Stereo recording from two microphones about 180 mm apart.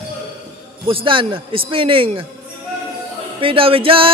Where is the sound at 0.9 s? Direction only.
30° right (ahead or behind).